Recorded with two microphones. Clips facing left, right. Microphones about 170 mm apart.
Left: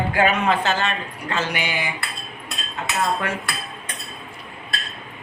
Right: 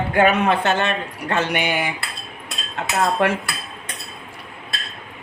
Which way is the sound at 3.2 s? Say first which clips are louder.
Right 8 dB; 80° right.